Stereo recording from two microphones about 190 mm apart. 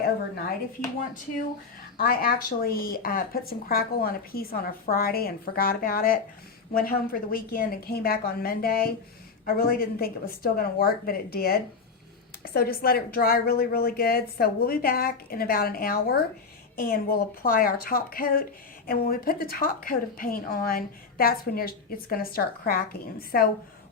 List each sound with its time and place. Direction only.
2.0 s a woman's voice: 50° left (ahead or behind)